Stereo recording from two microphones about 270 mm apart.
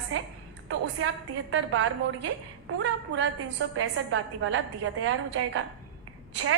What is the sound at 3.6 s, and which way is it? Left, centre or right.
A woman's voice, right.